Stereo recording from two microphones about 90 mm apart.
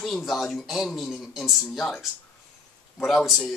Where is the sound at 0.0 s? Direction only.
Centre (ahead or behind).